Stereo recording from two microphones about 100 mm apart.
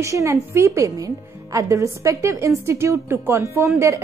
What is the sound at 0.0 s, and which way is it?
A woman's voice, 30° right (ahead or behind).